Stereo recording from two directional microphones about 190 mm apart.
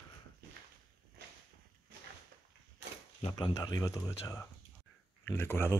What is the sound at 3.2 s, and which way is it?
Speech, 25° left (ahead or behind).